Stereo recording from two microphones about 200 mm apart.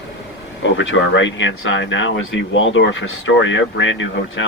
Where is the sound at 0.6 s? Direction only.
65° left (ahead or behind).